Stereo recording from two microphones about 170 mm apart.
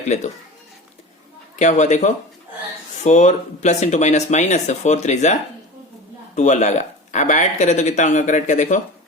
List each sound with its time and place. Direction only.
0.1 s speech: 40° left (ahead or behind)
1.5 s speech: 45° left (ahead or behind)